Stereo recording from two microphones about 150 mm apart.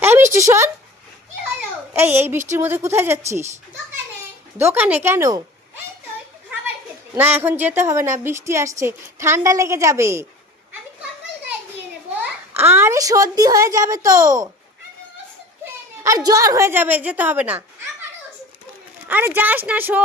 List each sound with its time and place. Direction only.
0.0 s a sound: 15° right (ahead or behind)
0.4 s speech: 20° right (ahead or behind)
2.0 s speech: 15° right (ahead or behind)
4.5 s speech: 15° right (ahead or behind)
7.2 s a woman's voice: 15° right (ahead or behind)
12.2 s a child's voice: 15° right (ahead or behind)
16.0 s speech: 25° right (ahead or behind)
19.0 s speech: 15° right (ahead or behind)